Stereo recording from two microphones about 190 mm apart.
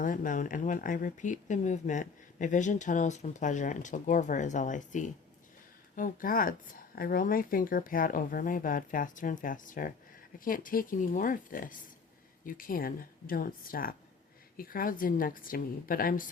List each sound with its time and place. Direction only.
0.0 s speech: 45° left (ahead or behind)